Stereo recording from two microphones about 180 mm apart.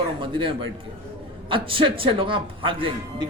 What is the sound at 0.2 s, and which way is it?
A man's voice, 30° right (ahead or behind).